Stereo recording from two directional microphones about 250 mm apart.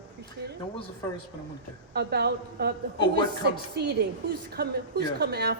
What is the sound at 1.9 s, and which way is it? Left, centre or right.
Speech, right.